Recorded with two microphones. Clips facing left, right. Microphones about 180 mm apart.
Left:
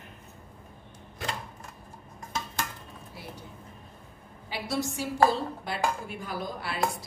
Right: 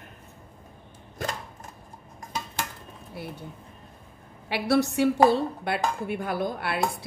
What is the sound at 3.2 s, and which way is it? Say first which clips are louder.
Speech: right 7 dB; 60° right (ahead or behind).